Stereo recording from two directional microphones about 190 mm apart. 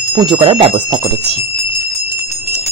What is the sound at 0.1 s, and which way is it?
Speech, 25° right (ahead or behind).